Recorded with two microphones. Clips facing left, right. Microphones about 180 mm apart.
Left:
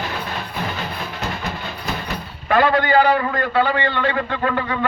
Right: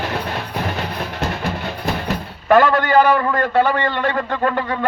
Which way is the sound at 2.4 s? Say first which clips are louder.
Right 3 dB; 45° right (ahead or behind).